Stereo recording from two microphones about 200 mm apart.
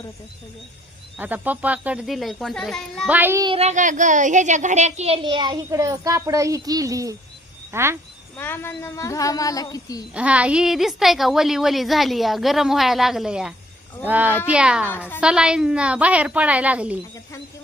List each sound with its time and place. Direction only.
1.2 s a woman's voice: 10° right (ahead or behind)
3.1 s a woman's voice: 10° right (ahead or behind)
3.4 s a woman's voice: 30° right (ahead or behind); by 7.9 s 10° right (ahead or behind)
8.4 s speech: 10° left (ahead or behind)
10.2 s a woman's voice: 5° right (ahead or behind)